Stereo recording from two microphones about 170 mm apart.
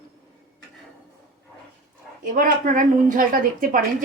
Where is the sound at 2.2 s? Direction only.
55° right (ahead or behind).